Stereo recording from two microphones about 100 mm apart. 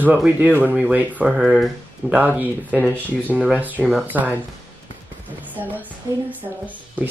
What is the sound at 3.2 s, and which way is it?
Speech, 15° right (ahead or behind).